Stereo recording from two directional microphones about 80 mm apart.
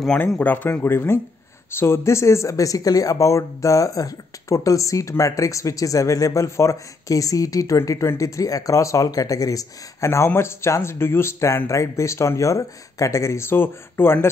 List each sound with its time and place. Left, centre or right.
0.4 s speech: left